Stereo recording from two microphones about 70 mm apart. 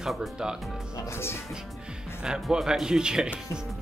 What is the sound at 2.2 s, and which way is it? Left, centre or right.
Speech, centre.